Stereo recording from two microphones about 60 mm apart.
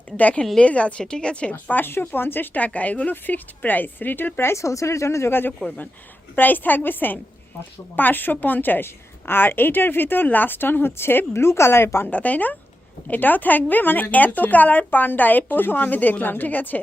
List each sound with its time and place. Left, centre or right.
0.2 s speech: left
1.7 s speech: left
5.3 s speech: left
12.0 s speech: left